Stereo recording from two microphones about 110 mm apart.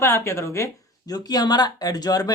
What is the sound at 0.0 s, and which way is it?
Speech, 25° left (ahead or behind).